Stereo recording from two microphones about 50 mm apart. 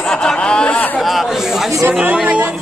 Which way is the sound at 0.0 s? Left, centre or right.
Centre.